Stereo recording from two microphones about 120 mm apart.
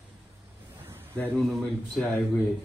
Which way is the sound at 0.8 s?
20° right (ahead or behind).